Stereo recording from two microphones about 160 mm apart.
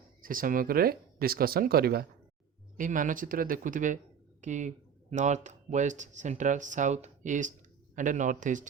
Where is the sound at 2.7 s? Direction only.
55° right (ahead or behind).